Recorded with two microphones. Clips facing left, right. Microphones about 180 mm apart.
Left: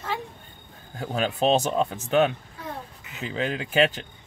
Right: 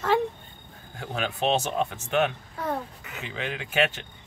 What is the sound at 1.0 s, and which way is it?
Speech, 40° left (ahead or behind).